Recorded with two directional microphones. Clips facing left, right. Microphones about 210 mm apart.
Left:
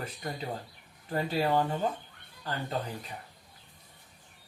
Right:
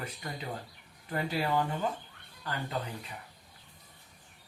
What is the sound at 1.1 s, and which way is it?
Speech, 30° left (ahead or behind).